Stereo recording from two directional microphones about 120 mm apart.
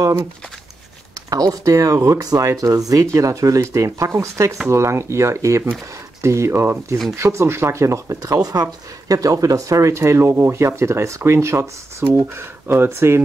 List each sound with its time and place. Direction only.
0.0 s speech: 25° right (ahead or behind)
1.3 s speech: 30° right (ahead or behind)